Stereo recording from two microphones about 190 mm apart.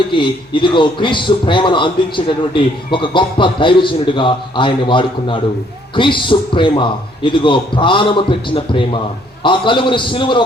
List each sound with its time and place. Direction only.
0.2 s a man's voice: 25° left (ahead or behind)